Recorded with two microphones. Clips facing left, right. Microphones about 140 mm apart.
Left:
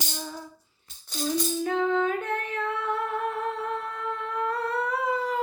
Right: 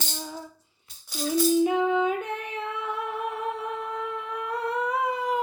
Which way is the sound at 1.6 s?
15° right (ahead or behind).